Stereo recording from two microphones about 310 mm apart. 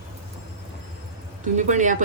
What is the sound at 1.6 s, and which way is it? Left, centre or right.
Speech, right.